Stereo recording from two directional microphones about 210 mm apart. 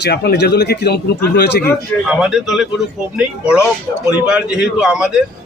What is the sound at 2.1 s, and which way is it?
A man's voice, 5° right (ahead or behind).